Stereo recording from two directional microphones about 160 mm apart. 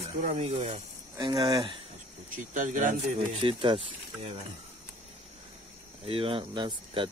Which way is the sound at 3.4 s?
30° right (ahead or behind).